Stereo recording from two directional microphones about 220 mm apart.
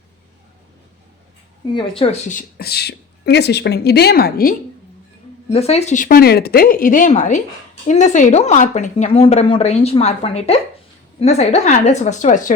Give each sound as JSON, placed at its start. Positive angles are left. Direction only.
{"t": 1.7, "sound": "speech", "side_deg": 25}
{"t": 5.5, "sound": "speech", "side_deg": 30}